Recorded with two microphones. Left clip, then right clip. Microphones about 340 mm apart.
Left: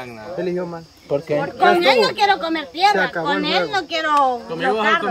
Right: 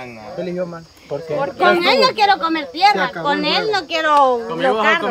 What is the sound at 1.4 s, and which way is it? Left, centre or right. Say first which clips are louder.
Speech: right 1 dB; right.